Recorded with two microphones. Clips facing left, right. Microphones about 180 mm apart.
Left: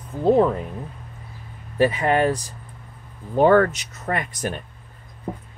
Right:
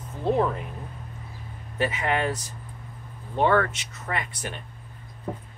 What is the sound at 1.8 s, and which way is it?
Speech, 35° left (ahead or behind).